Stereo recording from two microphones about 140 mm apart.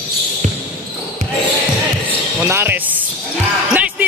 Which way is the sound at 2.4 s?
15° right (ahead or behind).